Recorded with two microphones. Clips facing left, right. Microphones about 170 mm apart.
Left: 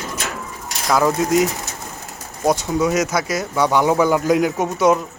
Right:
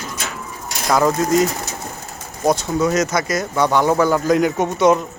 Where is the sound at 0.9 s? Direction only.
5° left (ahead or behind).